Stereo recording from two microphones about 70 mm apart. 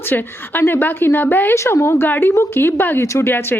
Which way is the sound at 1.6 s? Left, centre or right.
Left.